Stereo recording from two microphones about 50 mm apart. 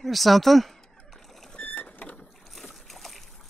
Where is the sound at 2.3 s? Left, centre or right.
Centre.